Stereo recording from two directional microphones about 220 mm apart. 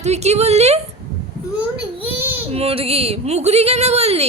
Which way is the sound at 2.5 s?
25° right (ahead or behind).